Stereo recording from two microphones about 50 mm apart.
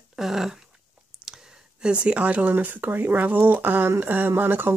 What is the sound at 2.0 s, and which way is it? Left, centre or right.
Speech, right.